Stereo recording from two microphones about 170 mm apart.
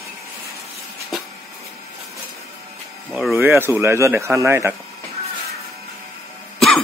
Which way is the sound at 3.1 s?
5° right (ahead or behind).